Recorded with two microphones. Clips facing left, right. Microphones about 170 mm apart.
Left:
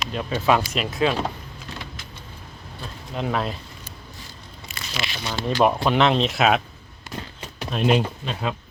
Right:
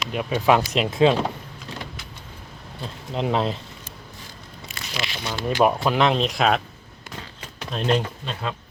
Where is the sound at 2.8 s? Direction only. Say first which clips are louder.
Right 2 dB; 20° right (ahead or behind).